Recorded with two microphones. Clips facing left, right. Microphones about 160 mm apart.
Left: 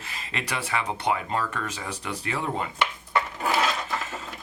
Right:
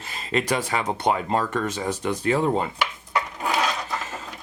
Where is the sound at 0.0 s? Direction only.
35° right (ahead or behind).